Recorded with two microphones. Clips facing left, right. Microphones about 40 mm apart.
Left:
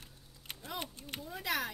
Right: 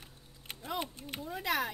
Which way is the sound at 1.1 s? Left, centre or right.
Right.